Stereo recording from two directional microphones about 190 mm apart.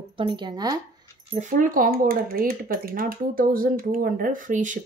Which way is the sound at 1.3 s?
40° right (ahead or behind).